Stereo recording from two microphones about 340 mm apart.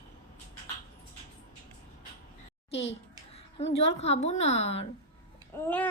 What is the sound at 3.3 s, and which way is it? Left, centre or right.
A woman's voice, centre.